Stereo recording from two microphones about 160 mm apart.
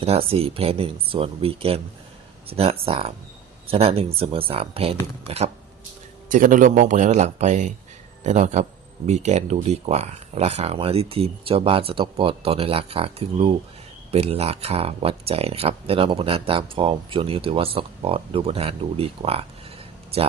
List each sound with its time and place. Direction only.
0.0 s speech: 35° right (ahead or behind)
6.2 s a man's voice: 55° right (ahead or behind); by 19.5 s 35° right (ahead or behind)